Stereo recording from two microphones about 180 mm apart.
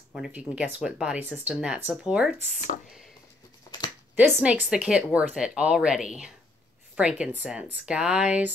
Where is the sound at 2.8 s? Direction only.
Centre (ahead or behind).